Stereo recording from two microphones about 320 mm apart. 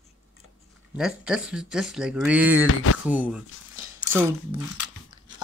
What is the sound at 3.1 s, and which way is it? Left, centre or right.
Speech, centre.